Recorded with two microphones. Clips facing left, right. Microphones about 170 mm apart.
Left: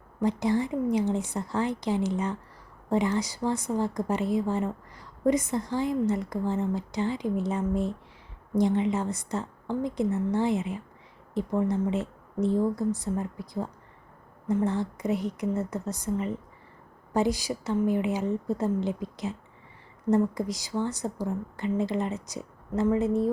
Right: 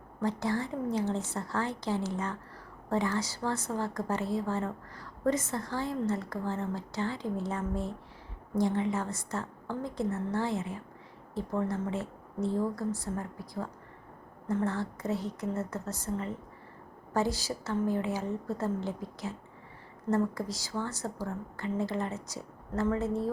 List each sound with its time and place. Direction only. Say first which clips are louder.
0.2 s a woman's voice: left 5 dB; 15° left (ahead or behind)